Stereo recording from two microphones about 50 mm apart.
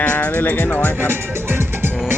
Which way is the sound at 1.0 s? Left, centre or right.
Right.